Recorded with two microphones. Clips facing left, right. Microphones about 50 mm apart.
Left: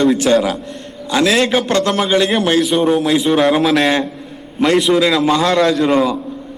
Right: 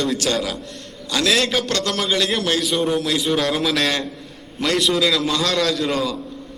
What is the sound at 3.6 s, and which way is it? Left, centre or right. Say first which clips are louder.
Speech: left 7 dB; centre.